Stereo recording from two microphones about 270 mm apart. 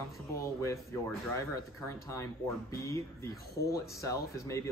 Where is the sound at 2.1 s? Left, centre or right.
Centre.